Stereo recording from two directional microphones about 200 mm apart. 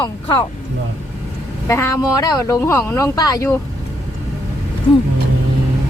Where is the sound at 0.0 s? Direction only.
25° left (ahead or behind).